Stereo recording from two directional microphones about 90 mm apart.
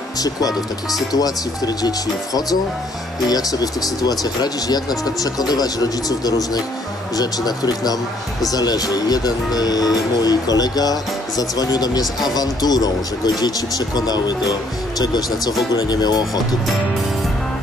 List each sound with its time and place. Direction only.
0.2 s speech: 40° left (ahead or behind)